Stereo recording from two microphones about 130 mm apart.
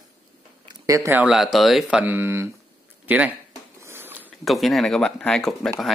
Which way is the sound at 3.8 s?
15° right (ahead or behind).